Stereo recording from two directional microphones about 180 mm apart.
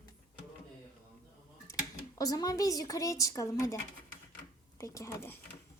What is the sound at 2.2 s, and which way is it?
A woman's voice, 20° left (ahead or behind).